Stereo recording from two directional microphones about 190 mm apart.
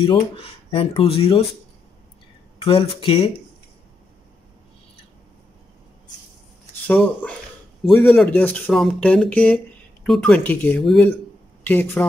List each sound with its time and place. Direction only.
0.0 s speech: 25° left (ahead or behind)
2.6 s speech: 30° left (ahead or behind)
6.9 s speech: 10° left (ahead or behind)